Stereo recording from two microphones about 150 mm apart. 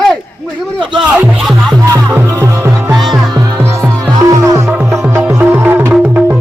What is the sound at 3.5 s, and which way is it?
Music, 15° right (ahead or behind).